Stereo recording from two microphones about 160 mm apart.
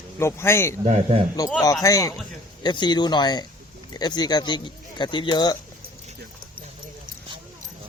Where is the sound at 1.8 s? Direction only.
20° left (ahead or behind).